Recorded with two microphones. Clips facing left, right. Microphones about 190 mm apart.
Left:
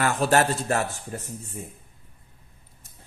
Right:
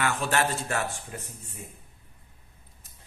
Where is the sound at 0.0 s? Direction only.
35° left (ahead or behind).